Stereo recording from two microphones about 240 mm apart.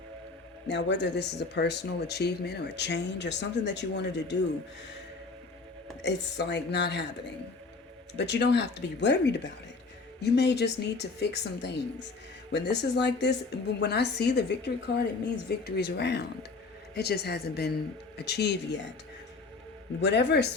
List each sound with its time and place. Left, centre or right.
0.7 s speech: left
6.0 s speech: left
8.1 s a woman's voice: left
20.0 s speech: left